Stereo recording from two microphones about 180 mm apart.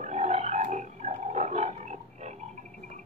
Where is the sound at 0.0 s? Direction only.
40° right (ahead or behind).